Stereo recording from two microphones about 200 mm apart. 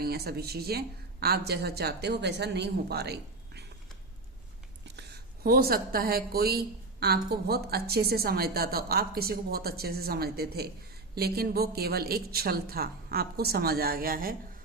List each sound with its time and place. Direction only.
0.0 s speech: 50° right (ahead or behind)
4.9 s speech: 50° right (ahead or behind)